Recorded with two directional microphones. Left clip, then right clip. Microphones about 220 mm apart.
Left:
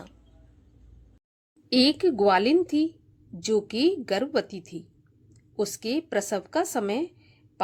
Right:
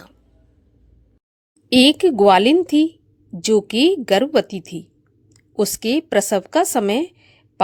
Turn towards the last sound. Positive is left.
turn(degrees=-35)  # may be behind; listen again after turning